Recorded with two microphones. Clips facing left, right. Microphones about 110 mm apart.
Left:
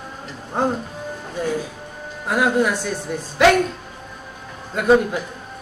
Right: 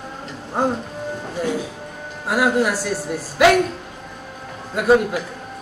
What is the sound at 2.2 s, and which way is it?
Speech, 5° right (ahead or behind).